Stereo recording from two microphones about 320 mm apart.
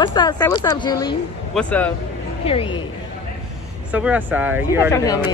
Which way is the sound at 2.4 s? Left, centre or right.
Centre.